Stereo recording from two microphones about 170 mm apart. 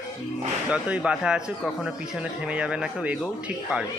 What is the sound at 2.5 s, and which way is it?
Speech, 5° right (ahead or behind).